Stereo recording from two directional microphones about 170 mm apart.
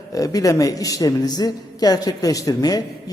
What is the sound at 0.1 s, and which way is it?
A man's voice, 20° left (ahead or behind).